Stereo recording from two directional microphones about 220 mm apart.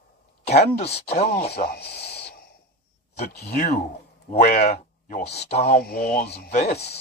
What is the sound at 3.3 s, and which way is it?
Speech, 40° left (ahead or behind).